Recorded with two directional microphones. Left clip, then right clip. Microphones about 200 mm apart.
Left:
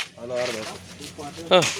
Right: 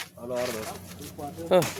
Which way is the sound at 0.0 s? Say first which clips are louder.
Left 4 dB; 30° left (ahead or behind).